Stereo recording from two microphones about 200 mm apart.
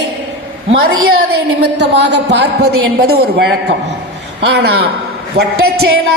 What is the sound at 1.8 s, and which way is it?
A woman's voice, 60° right (ahead or behind).